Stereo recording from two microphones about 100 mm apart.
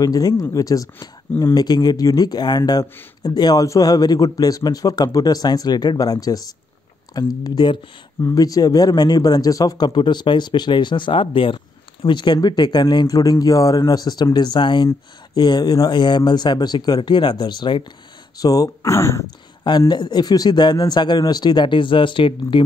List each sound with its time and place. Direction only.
0.0 s speech: 40° left (ahead or behind)
18.4 s speech: 40° left (ahead or behind)
19.9 s speech: 45° left (ahead or behind)